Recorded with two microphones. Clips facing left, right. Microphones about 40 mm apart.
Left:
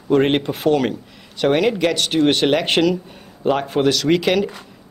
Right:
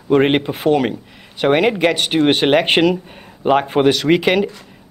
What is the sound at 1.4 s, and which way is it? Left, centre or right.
A man's voice, right.